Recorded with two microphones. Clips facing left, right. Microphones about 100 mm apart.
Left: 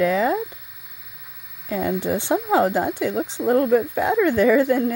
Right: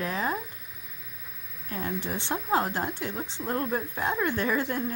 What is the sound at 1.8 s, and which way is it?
Speech, 90° left.